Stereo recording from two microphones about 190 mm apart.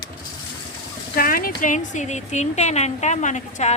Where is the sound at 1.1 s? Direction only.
50° left (ahead or behind).